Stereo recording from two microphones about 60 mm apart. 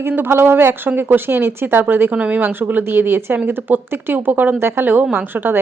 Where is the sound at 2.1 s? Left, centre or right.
Right.